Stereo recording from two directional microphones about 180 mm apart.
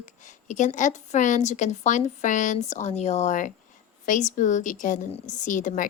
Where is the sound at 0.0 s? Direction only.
45° left (ahead or behind).